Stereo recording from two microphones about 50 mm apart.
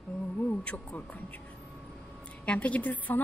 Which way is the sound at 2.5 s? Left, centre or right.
Left.